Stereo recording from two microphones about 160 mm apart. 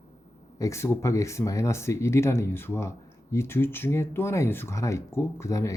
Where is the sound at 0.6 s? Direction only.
15° left (ahead or behind).